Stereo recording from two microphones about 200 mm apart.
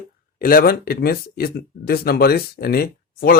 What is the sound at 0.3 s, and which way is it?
Speech, 45° left (ahead or behind).